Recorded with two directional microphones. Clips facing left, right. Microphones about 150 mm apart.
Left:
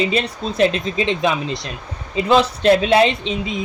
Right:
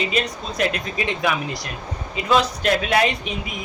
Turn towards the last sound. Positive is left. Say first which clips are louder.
# left 5 dB
turn(degrees=25)  # may be behind; listen again after turning